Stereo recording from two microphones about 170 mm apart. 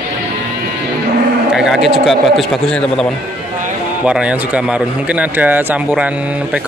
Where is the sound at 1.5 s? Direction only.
5° right (ahead or behind).